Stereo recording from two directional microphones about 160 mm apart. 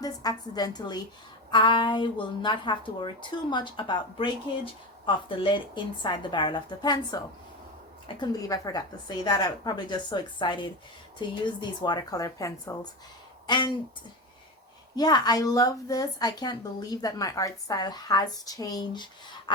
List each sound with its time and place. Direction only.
0.0 s speech: 25° left (ahead or behind)
14.9 s speech: 25° left (ahead or behind)
19.5 s a sound: 30° left (ahead or behind)